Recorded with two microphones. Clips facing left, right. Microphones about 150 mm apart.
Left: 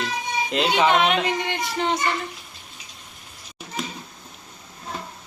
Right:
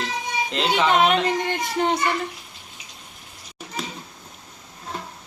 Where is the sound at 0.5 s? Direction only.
5° left (ahead or behind).